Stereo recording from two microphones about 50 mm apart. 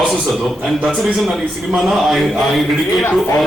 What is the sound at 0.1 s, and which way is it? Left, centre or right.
A man's voice, centre.